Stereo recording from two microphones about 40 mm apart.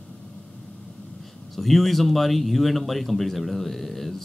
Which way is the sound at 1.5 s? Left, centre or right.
Centre.